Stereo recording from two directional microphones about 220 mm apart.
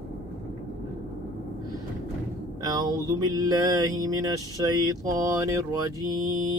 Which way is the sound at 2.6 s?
15° right (ahead or behind).